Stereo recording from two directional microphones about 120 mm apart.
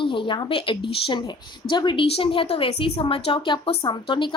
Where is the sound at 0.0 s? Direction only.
45° left (ahead or behind).